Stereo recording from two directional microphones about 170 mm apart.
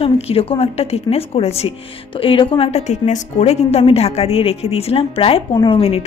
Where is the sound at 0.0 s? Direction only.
35° left (ahead or behind).